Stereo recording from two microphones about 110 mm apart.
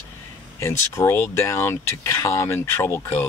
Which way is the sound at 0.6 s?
25° left (ahead or behind).